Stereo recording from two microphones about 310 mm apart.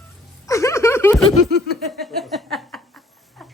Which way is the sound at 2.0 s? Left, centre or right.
Centre.